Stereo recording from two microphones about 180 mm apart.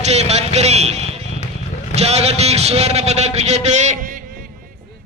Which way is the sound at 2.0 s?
35° right (ahead or behind).